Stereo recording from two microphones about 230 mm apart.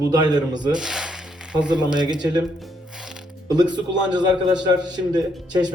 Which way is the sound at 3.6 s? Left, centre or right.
Centre.